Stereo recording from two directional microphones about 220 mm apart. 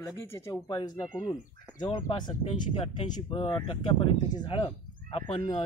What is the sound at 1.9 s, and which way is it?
Speech, 20° left (ahead or behind).